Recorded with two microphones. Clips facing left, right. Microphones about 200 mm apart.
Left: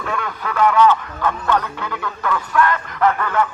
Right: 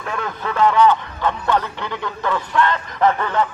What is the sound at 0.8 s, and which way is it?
Speech, 15° right (ahead or behind).